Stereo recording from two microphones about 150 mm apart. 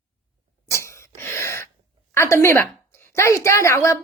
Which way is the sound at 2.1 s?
20° left (ahead or behind).